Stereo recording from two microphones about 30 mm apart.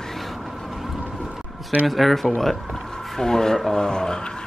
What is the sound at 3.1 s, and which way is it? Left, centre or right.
Speech, centre.